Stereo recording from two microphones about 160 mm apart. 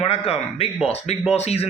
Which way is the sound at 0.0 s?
40° left (ahead or behind).